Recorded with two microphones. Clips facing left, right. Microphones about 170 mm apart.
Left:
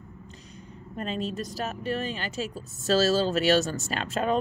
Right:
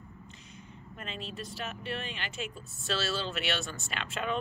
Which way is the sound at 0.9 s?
40° left (ahead or behind).